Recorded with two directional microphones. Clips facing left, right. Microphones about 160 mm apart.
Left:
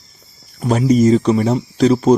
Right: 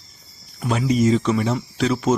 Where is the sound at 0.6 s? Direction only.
40° left (ahead or behind).